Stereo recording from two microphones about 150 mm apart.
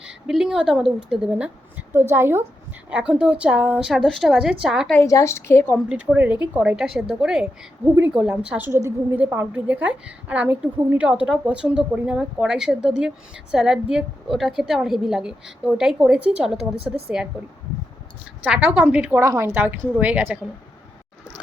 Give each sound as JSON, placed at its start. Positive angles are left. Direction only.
{"t": 0.0, "sound": "a woman's voice", "side_deg": -5}
{"t": 1.9, "sound": "a woman's voice", "side_deg": -15}
{"t": 4.9, "sound": "a woman's voice", "side_deg": 20}
{"t": 5.7, "sound": "a woman's voice", "side_deg": -5}
{"t": 18.4, "sound": "a woman's voice", "side_deg": -10}